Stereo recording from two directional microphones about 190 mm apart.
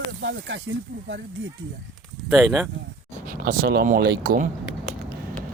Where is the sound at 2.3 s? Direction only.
5° right (ahead or behind).